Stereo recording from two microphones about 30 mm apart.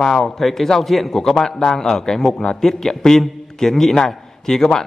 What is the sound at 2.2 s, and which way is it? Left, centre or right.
Speech, left.